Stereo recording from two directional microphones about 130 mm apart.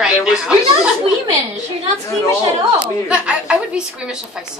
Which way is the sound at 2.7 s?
10° right (ahead or behind).